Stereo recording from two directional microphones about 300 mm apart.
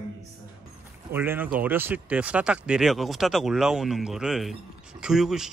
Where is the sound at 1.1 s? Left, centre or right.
Centre.